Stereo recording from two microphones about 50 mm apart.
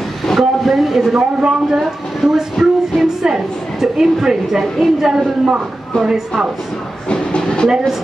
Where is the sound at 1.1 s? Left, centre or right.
Centre.